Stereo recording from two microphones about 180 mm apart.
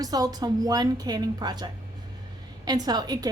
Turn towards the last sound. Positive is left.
turn(degrees=-20)  # may be behind; listen again after turning